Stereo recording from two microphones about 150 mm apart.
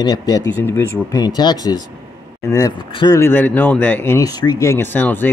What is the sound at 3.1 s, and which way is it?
Speech, 15° left (ahead or behind).